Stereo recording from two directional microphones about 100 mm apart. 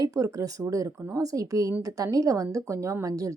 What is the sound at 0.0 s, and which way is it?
Speech, 35° right (ahead or behind).